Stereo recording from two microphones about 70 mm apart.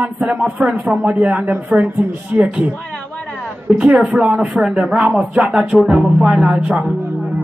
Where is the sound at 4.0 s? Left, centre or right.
Centre.